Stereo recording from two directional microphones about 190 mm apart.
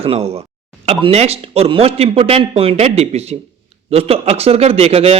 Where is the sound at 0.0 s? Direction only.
30° right (ahead or behind).